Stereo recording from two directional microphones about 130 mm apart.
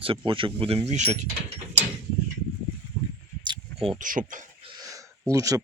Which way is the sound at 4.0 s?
90° right.